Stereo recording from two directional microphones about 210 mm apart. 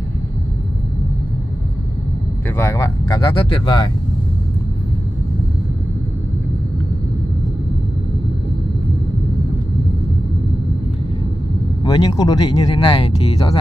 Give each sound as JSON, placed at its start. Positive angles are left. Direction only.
{"t": 2.5, "sound": "speech", "side_deg": 15}
{"t": 11.8, "sound": "speech", "side_deg": 20}